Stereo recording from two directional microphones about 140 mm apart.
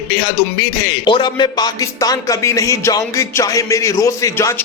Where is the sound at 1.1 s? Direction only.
35° left (ahead or behind).